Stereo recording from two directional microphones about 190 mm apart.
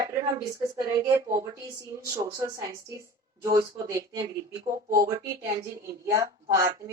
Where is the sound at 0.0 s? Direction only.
20° right (ahead or behind).